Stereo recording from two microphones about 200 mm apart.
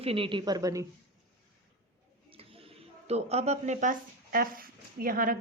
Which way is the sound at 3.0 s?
30° right (ahead or behind).